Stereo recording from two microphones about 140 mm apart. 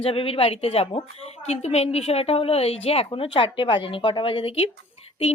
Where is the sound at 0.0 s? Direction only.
40° left (ahead or behind).